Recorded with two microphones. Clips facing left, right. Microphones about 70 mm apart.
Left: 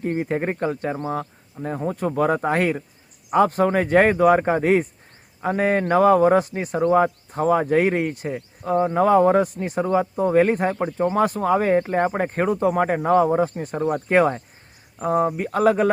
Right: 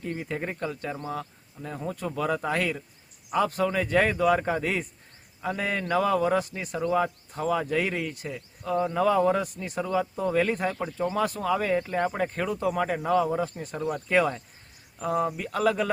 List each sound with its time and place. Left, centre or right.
0.0 s speech: left
6.8 s speech: left